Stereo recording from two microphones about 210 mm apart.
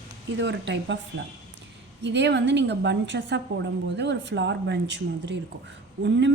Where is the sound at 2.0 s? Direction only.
55° right (ahead or behind).